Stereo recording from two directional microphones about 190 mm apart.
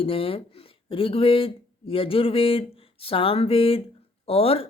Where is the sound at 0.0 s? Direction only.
30° left (ahead or behind).